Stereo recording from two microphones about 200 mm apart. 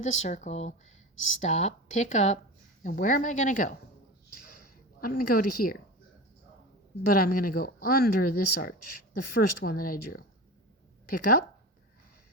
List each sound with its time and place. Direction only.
0.0 s speech: 35° left (ahead or behind)
1.1 s speech: 75° left (ahead or behind)
1.4 s speech: 35° left (ahead or behind)
4.9 s speech: 45° left (ahead or behind)
7.1 s speech: 45° left (ahead or behind)